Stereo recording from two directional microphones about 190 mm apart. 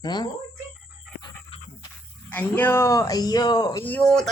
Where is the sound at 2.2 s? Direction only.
10° left (ahead or behind).